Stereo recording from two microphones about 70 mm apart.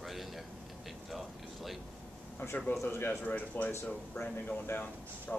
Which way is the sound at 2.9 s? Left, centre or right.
Left.